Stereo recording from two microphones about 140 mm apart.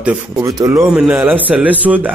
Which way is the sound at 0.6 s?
20° right (ahead or behind).